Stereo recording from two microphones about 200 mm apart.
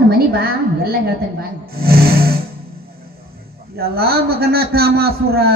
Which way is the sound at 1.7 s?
50° right (ahead or behind).